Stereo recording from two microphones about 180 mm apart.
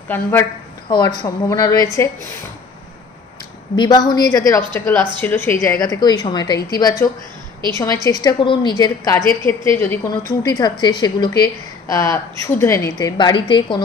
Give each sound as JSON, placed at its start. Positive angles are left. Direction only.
{"t": 0.1, "sound": "a woman's voice", "side_deg": 10}
{"t": 0.8, "sound": "a woman's voice", "side_deg": 25}
{"t": 3.7, "sound": "a woman's voice", "side_deg": 25}
{"t": 5.8, "sound": "a woman's voice", "side_deg": 20}